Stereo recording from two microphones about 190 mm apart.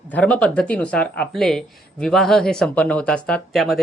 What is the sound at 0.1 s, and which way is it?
Speech, 5° left (ahead or behind).